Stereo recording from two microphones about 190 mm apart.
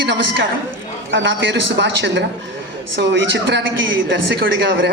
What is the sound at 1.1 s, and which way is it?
A woman's voice, 70° right (ahead or behind).